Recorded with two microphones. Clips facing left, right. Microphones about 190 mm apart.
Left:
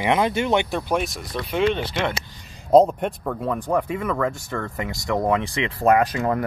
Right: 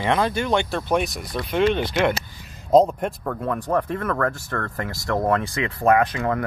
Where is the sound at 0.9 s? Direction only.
Centre (ahead or behind).